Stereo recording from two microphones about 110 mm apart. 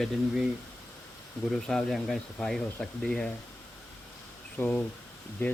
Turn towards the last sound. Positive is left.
turn(degrees=20)  # may be behind; listen again after turning